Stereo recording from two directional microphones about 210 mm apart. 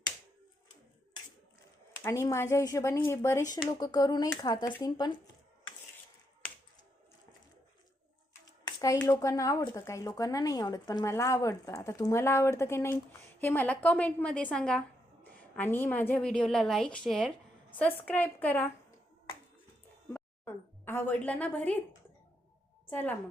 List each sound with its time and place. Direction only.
2.0 s speech: 15° left (ahead or behind)
8.6 s a woman's voice: 15° left (ahead or behind)
20.1 s a woman's voice: 10° left (ahead or behind)
22.9 s a woman's voice: 10° left (ahead or behind)